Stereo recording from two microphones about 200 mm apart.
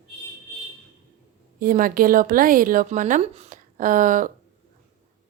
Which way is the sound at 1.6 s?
45° right (ahead or behind).